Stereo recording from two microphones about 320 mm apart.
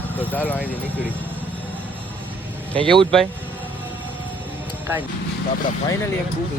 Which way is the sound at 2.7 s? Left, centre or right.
Centre.